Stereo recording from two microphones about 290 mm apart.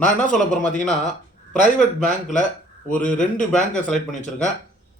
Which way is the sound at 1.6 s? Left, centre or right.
Left.